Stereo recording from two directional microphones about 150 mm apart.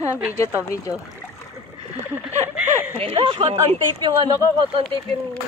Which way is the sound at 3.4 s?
45° right (ahead or behind).